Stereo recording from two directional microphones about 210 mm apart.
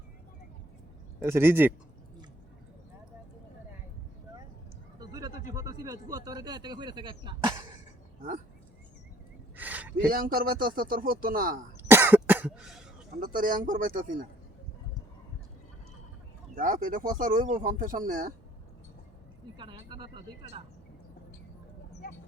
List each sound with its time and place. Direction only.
1.2 s speech: 10° right (ahead or behind)
4.9 s a sound: 20° right (ahead or behind)
5.5 s speech: 15° right (ahead or behind)
9.6 s a sound: 10° right (ahead or behind)
10.1 s a man's voice: 45° right (ahead or behind)
11.8 s cough: 10° right (ahead or behind)
13.1 s speech: 40° right (ahead or behind)
16.6 s speech: 40° right (ahead or behind)
19.5 s speech: 25° right (ahead or behind)